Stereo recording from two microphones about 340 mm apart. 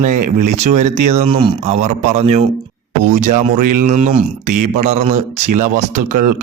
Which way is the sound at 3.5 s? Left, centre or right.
Right.